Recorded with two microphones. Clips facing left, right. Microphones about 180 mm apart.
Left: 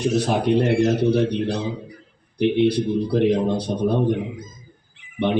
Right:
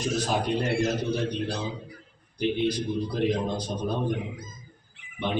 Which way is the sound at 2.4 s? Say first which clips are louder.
Left 8 dB; 65° left (ahead or behind).